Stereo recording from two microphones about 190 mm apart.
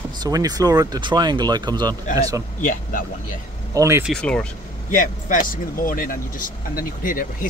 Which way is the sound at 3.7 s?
15° right (ahead or behind).